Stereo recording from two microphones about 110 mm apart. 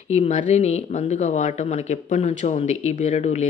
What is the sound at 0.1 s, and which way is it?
Speech, 85° left.